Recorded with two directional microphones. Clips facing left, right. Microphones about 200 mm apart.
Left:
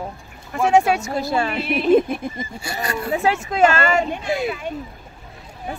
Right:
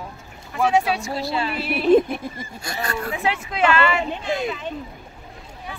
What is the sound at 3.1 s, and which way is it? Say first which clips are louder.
Speech: left 5 dB; 45° left (ahead or behind).